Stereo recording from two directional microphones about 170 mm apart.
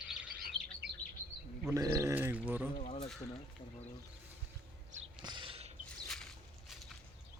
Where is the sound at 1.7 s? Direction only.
20° right (ahead or behind).